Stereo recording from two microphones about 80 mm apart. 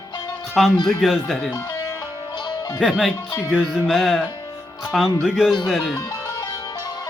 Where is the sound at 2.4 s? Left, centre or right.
Left.